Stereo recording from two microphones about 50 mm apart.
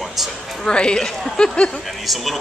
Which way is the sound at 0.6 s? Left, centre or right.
Centre.